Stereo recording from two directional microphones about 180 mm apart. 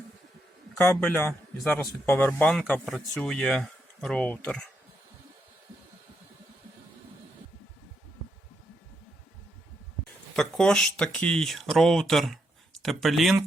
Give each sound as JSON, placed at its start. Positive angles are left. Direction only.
{"t": 0.8, "sound": "a man's voice", "side_deg": 10}
{"t": 10.3, "sound": "speech", "side_deg": 5}